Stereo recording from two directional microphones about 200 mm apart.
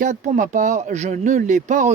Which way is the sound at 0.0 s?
40° right (ahead or behind).